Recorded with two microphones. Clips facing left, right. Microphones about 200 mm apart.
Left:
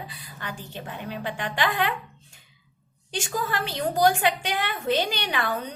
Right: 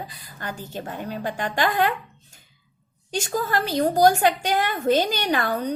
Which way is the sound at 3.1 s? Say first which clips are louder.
Right 4 dB; 40° right (ahead or behind).